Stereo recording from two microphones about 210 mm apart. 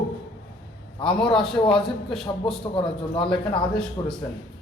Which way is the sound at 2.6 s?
25° left (ahead or behind).